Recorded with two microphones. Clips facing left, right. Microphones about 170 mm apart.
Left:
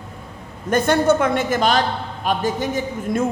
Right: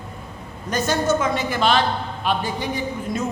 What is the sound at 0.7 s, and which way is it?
A woman's voice, 55° left (ahead or behind).